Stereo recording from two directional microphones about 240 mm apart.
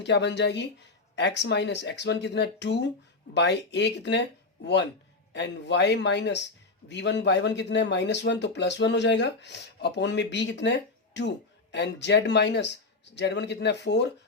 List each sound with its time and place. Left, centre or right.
0.0 s a man's voice: left